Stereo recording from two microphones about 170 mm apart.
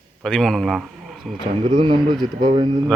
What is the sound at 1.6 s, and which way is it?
Speech, 30° right (ahead or behind).